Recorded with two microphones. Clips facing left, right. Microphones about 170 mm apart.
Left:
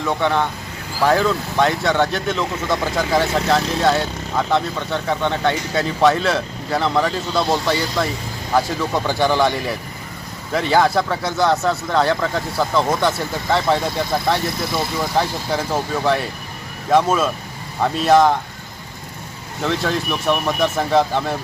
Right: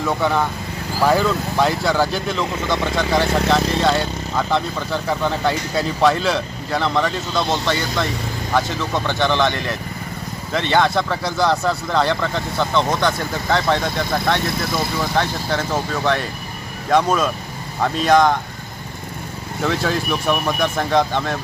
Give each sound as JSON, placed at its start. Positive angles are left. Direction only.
{"t": 0.0, "sound": "speech", "side_deg": -5}
{"t": 15.2, "sound": "speech", "side_deg": 10}
{"t": 19.6, "sound": "speech", "side_deg": 0}